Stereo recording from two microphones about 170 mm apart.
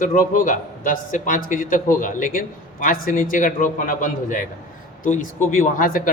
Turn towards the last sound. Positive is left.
turn(degrees=55)  # may be behind; listen again after turning